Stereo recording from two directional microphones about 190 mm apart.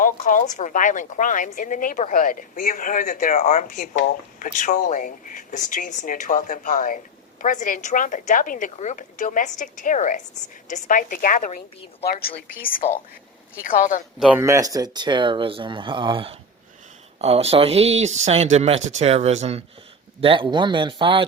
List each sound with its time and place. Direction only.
0.0 s a woman's voice: 45° left (ahead or behind)
14.2 s speech: 10° right (ahead or behind); by 21.2 s 25° right (ahead or behind)